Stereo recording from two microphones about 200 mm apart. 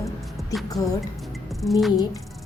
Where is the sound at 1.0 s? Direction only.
Centre (ahead or behind).